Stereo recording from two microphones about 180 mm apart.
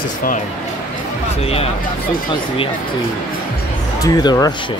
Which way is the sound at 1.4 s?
35° left (ahead or behind).